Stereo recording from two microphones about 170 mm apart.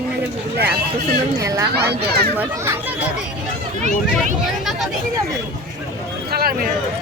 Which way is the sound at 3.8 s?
45° right (ahead or behind).